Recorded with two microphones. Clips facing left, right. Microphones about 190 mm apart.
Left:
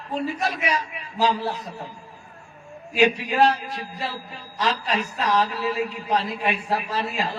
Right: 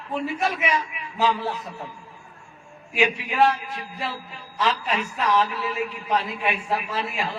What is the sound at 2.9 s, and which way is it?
A man's voice, 40° left (ahead or behind).